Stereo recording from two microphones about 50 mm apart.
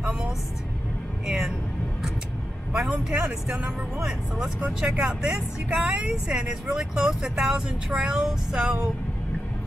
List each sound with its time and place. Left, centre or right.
0.0 s vehicle: centre
1.2 s speech: centre
2.7 s speech: centre
8.5 s music: centre